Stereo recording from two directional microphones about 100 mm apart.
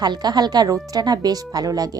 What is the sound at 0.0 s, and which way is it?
A woman's voice, 45° right (ahead or behind).